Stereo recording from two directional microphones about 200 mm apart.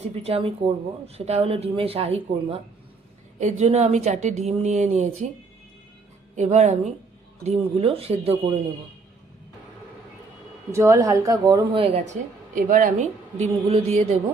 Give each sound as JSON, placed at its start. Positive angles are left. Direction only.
{"t": 0.2, "sound": "a woman's voice", "side_deg": -30}
{"t": 6.3, "sound": "a woman's voice", "side_deg": -35}
{"t": 10.7, "sound": "a woman's voice", "side_deg": -15}
{"t": 12.5, "sound": "speech", "side_deg": -45}
{"t": 13.4, "sound": "a woman's voice", "side_deg": -30}